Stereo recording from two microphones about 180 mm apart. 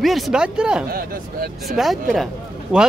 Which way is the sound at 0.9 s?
55° right (ahead or behind).